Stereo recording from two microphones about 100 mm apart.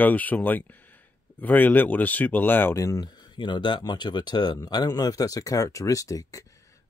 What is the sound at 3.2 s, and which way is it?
Speech, 50° left (ahead or behind).